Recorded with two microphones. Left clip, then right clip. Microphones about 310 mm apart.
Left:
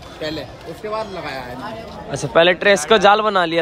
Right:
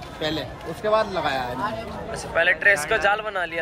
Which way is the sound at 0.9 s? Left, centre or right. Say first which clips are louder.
Right 4 dB; centre.